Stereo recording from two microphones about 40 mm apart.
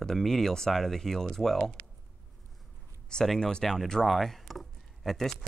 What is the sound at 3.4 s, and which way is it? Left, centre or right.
Speech, centre.